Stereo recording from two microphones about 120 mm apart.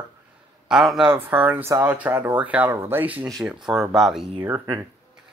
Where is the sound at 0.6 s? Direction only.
5° right (ahead or behind).